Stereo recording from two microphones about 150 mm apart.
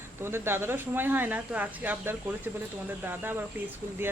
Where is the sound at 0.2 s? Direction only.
15° right (ahead or behind).